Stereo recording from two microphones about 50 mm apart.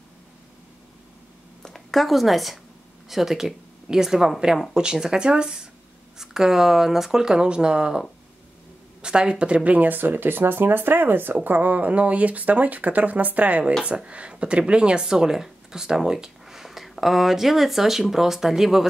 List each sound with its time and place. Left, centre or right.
1.6 s speech: centre
9.0 s speech: centre
9.8 s speech: right; by 18.9 s centre